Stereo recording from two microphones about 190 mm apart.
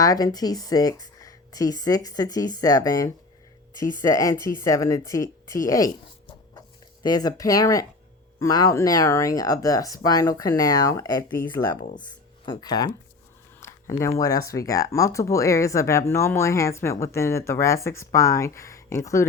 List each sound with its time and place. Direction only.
0.0 s speech: 20° left (ahead or behind)
7.0 s speech: 20° left (ahead or behind)
12.5 s speech: 20° left (ahead or behind)
13.6 s a sound: 15° left (ahead or behind)
14.2 s speech: 15° left (ahead or behind)